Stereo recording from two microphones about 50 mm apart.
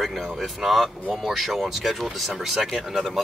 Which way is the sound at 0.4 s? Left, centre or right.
Centre.